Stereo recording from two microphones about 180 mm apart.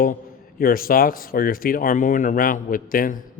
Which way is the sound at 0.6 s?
55° left (ahead or behind).